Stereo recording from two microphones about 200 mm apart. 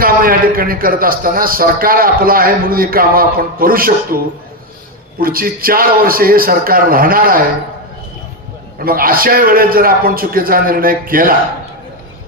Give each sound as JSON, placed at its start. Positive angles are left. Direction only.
{"t": 0.0, "sound": "a man's voice", "side_deg": -45}
{"t": 5.2, "sound": "a man's voice", "side_deg": -45}
{"t": 8.8, "sound": "a man's voice", "side_deg": -45}